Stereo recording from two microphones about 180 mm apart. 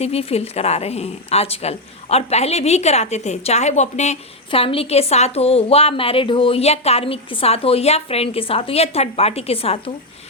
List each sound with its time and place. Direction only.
0.0 s a woman's voice: 35° left (ahead or behind)